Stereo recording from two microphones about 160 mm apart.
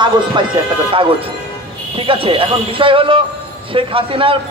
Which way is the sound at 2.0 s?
35° right (ahead or behind).